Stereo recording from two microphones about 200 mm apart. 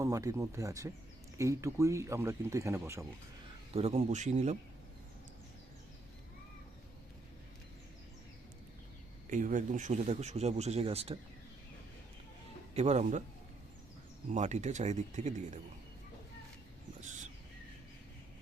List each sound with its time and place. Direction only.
0.0 s speech: 15° right (ahead or behind)
3.7 s speech: 30° right (ahead or behind)
9.3 s speech: 40° right (ahead or behind)
12.7 s speech: 35° right (ahead or behind)
14.3 s speech: 35° right (ahead or behind)